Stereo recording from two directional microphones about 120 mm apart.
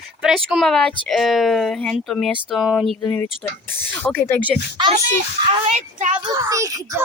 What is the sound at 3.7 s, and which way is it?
Speech, 15° left (ahead or behind).